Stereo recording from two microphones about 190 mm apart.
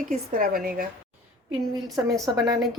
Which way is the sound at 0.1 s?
50° right (ahead or behind).